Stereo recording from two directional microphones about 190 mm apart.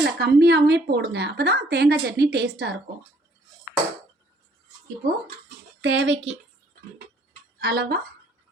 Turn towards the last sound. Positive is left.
turn(degrees=-55)  # may be behind; listen again after turning